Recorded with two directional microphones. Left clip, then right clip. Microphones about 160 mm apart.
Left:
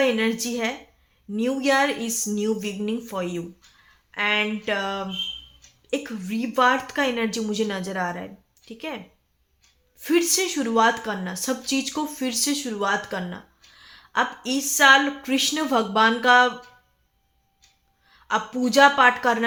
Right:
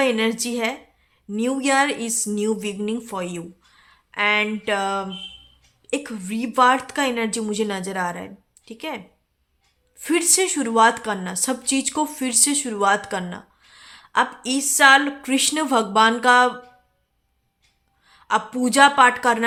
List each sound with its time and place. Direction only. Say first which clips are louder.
0.0 s a woman's voice: right 1 dB; 25° right (ahead or behind)
10.0 s a woman's voice: right 1 dB; 25° right (ahead or behind)
18.0 s a woman's voice: right 3 dB; 25° right (ahead or behind)